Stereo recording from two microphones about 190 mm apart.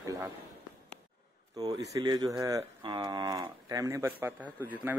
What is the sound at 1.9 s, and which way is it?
Speech, 20° right (ahead or behind).